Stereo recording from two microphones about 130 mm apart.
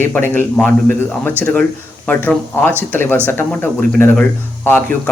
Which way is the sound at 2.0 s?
15° left (ahead or behind).